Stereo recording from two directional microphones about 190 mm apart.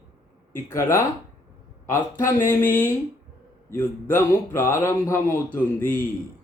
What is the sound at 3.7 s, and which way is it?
Speech, 10° left (ahead or behind).